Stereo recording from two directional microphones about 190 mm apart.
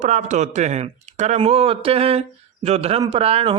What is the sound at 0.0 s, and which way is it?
Speech, 35° right (ahead or behind).